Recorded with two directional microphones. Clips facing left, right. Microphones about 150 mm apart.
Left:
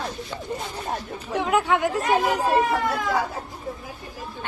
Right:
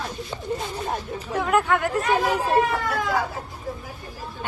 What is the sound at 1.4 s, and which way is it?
Speech, 20° left (ahead or behind).